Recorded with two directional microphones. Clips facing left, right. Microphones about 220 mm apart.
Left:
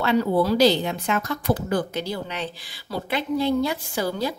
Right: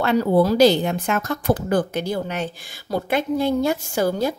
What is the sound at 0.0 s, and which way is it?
Speech, 45° right (ahead or behind).